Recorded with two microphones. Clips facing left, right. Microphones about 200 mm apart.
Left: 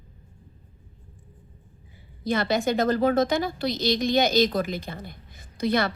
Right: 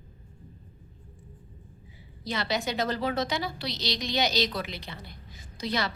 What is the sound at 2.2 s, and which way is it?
A woman's voice, 50° left (ahead or behind).